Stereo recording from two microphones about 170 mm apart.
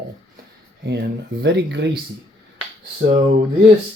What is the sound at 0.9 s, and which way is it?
Speech, 80° right.